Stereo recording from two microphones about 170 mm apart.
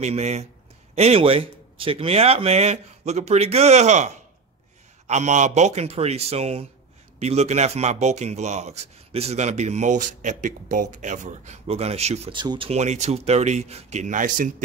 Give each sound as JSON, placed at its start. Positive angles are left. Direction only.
{"t": 0.0, "sound": "speech", "side_deg": -40}